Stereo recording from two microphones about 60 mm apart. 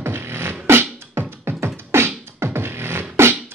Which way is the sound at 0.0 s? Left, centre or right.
Right.